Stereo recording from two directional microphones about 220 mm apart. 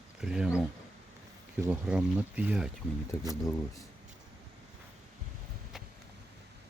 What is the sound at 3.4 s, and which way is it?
Speech, 15° left (ahead or behind).